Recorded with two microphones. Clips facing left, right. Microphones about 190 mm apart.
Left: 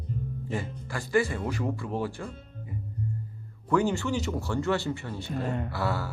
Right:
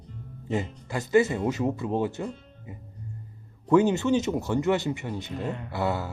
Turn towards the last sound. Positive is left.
turn(degrees=-20)  # may be behind; listen again after turning